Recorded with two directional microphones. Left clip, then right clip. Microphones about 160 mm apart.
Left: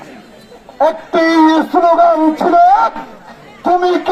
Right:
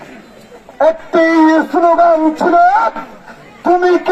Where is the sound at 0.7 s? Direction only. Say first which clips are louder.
Right 1 dB; 10° right (ahead or behind).